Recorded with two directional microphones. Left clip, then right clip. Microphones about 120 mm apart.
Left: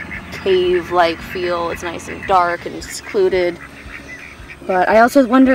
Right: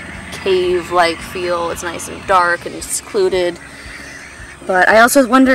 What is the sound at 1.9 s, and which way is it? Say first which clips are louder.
Speech: right 1 dB; centre (ahead or behind).